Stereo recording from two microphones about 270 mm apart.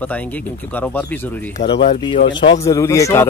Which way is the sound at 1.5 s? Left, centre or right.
Centre.